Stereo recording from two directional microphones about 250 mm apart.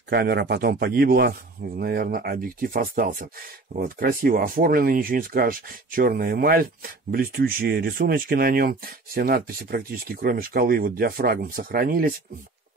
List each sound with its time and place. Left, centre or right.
0.1 s speech: right